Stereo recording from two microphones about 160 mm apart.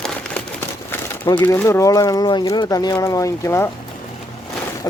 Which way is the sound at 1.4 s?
15° left (ahead or behind).